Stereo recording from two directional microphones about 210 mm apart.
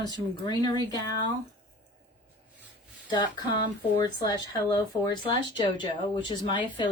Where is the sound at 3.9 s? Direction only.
20° left (ahead or behind).